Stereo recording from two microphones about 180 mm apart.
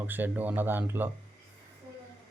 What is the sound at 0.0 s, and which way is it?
Speech, 10° right (ahead or behind).